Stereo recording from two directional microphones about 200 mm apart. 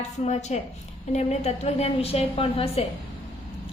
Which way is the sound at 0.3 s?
35° left (ahead or behind).